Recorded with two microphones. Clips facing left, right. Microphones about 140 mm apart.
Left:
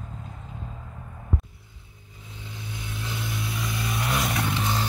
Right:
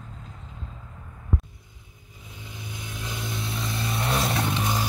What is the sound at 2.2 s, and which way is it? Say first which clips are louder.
Vehicle: left 1 dB; 15° right (ahead or behind).